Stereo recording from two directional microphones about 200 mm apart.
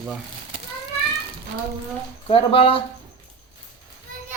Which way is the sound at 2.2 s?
25° left (ahead or behind).